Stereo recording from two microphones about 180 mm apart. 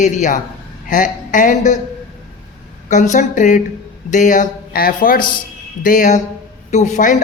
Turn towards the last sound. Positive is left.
turn(degrees=45)  # may be behind; listen again after turning